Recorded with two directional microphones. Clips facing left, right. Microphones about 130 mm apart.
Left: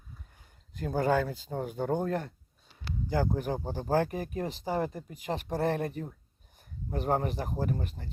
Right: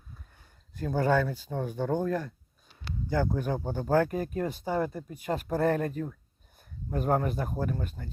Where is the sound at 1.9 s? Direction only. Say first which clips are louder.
Right 2 dB; 25° left (ahead or behind).